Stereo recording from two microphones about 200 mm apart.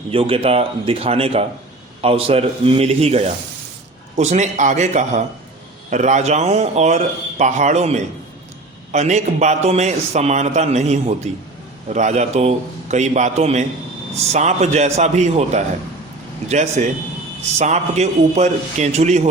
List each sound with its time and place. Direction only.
0.1 s a man's voice: 30° right (ahead or behind)